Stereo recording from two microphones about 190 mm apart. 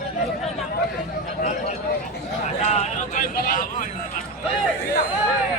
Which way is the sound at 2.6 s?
35° left (ahead or behind).